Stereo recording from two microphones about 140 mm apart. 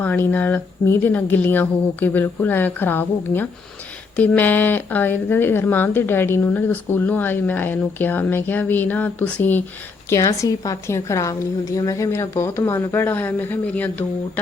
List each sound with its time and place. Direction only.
0.0 s a woman's voice: 10° left (ahead or behind)